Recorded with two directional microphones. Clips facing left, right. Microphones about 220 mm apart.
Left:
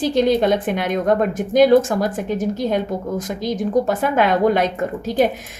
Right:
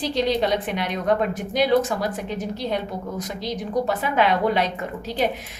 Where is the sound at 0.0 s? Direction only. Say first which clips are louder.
Left 6 dB; 50° left (ahead or behind).